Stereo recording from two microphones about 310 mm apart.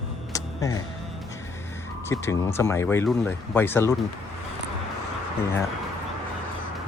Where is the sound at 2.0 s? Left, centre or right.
Centre.